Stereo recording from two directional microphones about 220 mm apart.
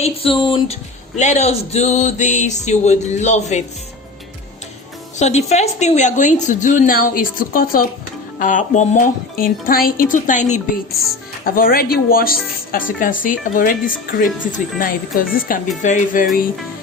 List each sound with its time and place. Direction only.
0.0 s speech: 25° left (ahead or behind)
5.1 s speech: 30° left (ahead or behind)